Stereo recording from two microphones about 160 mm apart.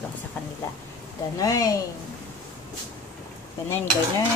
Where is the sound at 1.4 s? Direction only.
20° left (ahead or behind).